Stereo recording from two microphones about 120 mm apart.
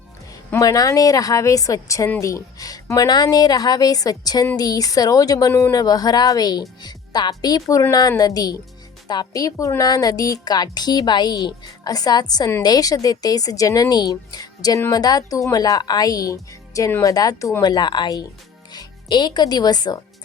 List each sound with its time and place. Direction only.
0.5 s a woman's voice: 30° left (ahead or behind)